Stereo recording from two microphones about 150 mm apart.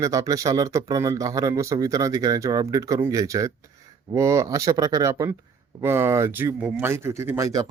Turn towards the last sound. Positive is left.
turn(degrees=-20)  # may be behind; listen again after turning